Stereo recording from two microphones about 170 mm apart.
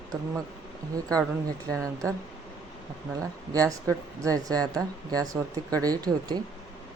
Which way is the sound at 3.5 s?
20° right (ahead or behind).